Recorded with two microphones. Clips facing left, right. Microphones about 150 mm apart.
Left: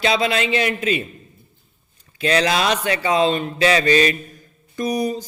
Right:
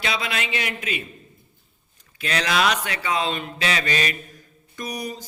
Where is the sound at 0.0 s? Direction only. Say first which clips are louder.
Left 8 dB; 30° left (ahead or behind).